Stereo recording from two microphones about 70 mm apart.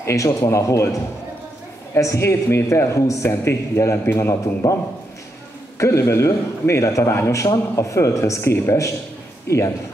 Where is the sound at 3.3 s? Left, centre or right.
Left.